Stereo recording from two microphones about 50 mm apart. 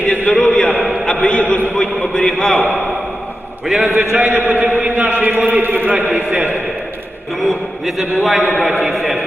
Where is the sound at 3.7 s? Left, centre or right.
Centre.